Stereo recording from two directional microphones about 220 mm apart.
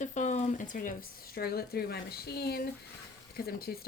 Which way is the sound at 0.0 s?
35° left (ahead or behind).